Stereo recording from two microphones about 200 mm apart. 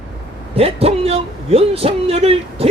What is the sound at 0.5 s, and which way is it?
A man's voice, 30° right (ahead or behind).